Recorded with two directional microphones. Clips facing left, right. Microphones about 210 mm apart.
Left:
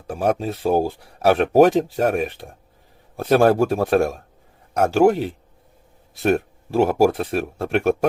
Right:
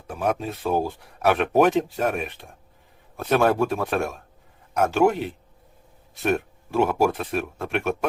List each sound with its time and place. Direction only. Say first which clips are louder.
0.1 s speech: left 4 dB; 35° left (ahead or behind)